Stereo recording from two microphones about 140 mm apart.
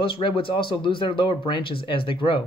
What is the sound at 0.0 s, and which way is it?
Speech, 40° left (ahead or behind).